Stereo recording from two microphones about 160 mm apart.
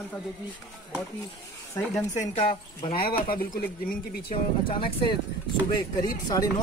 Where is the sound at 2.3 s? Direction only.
35° left (ahead or behind).